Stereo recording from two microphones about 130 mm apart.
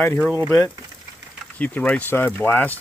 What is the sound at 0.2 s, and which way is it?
Speech, 15° right (ahead or behind).